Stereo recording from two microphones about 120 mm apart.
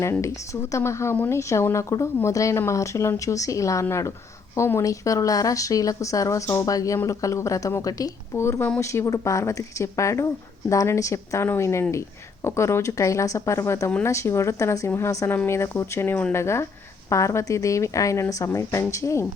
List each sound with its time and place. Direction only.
0.0 s speech: 25° left (ahead or behind)